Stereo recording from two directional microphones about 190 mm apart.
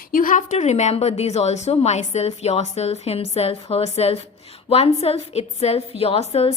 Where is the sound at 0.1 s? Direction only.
45° left (ahead or behind).